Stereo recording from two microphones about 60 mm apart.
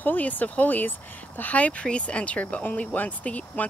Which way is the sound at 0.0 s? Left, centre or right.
Left.